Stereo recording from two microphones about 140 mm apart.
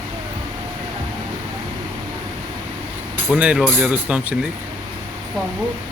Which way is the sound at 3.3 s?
10° right (ahead or behind).